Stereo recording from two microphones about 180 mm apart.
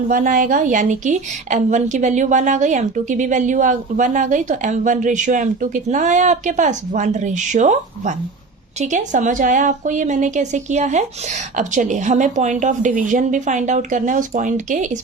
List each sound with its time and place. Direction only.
0.1 s a woman's voice: 50° right (ahead or behind)